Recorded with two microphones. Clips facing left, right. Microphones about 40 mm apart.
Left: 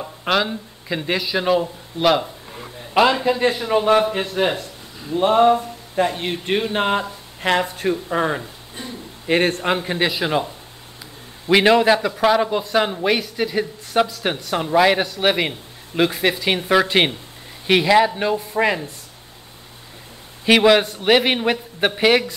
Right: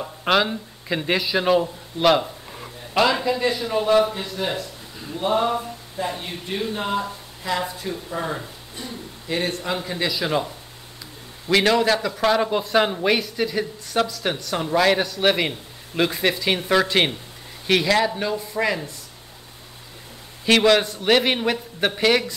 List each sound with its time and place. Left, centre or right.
0.0 s speech: centre
2.9 s a man's voice: centre
3.3 s speech: left
4.1 s a man's voice: left
6.0 s a man's voice: left
10.2 s a man's voice: centre
12.1 s speech: centre; by 18.8 s left
20.4 s speech: centre